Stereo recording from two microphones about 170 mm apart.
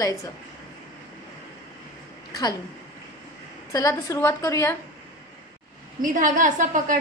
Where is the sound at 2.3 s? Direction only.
25° left (ahead or behind).